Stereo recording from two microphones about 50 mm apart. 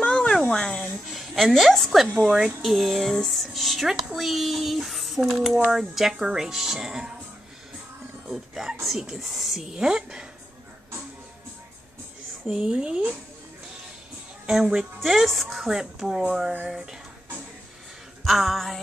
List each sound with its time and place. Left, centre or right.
0.0 s a sound: centre
2.1 s speech: centre
2.6 s speech: centre
8.3 s speech: centre
9.7 s speech: centre
12.4 s a woman's voice: centre
14.5 s speech: centre
18.2 s music: centre